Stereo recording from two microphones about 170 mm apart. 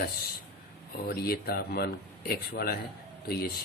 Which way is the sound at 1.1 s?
65° left (ahead or behind).